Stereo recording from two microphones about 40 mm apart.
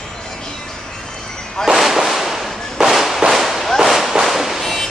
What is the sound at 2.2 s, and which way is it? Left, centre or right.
Firecracker, centre.